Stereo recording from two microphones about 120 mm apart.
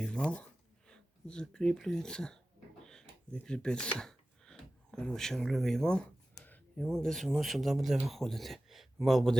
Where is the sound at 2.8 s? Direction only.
5° left (ahead or behind).